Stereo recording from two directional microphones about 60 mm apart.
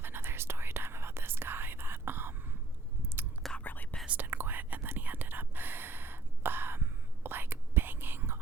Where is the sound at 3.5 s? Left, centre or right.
Left.